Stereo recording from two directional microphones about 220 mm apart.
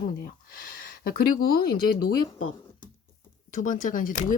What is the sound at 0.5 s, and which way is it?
Speech, 40° left (ahead or behind).